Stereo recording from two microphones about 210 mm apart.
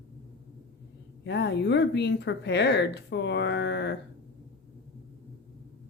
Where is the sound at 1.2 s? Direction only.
55° left (ahead or behind).